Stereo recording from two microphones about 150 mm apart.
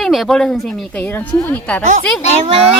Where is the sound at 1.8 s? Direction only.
55° right (ahead or behind).